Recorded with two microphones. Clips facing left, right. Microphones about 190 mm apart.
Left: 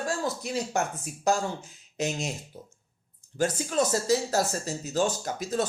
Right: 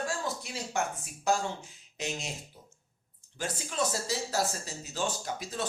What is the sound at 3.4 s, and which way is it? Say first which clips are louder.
Speech: left 7 dB; 45° left (ahead or behind).